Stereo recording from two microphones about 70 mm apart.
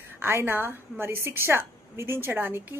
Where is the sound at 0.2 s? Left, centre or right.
Right.